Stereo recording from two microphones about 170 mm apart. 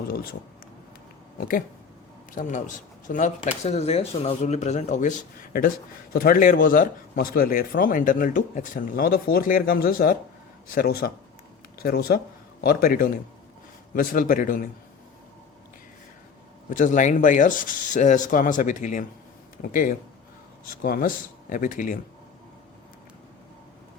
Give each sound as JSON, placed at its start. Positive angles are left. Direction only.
{"t": 0.1, "sound": "speech", "side_deg": 60}
{"t": 2.3, "sound": "speech", "side_deg": 50}
{"t": 16.6, "sound": "speech", "side_deg": 50}